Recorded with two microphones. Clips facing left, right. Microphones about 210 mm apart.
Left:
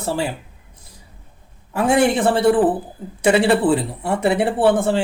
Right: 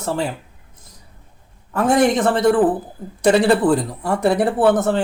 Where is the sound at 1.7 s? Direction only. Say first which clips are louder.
Right 1 dB; 10° left (ahead or behind).